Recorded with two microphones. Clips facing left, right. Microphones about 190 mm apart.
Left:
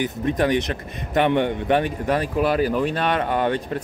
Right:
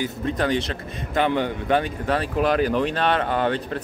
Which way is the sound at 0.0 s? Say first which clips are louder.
Left 3 dB; 20° left (ahead or behind).